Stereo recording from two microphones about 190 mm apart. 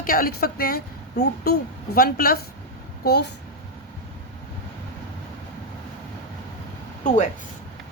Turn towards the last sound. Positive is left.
turn(degrees=40)  # may be behind; listen again after turning